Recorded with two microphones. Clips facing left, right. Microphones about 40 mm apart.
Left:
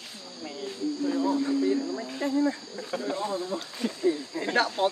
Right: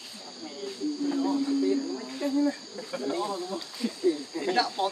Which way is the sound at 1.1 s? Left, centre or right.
Centre.